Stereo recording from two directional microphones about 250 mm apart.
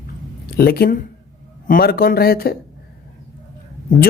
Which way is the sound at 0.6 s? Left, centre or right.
Left.